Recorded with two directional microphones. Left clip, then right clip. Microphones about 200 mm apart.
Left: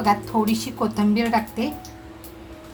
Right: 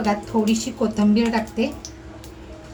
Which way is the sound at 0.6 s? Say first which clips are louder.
Right 1 dB; 30° left (ahead or behind).